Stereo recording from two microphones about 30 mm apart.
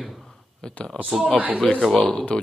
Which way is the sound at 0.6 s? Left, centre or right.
Left.